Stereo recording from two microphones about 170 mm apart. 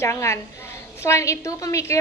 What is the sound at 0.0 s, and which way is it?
A woman's voice, 15° left (ahead or behind).